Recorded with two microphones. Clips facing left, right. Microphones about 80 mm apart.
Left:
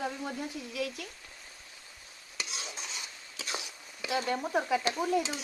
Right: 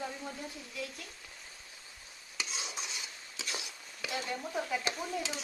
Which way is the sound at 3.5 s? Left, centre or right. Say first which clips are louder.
Left 3 dB; left.